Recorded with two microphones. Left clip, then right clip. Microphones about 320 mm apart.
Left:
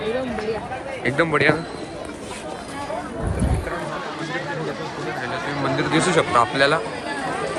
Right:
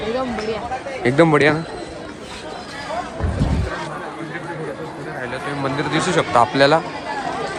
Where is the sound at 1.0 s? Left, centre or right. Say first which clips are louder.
Right 4 dB; centre.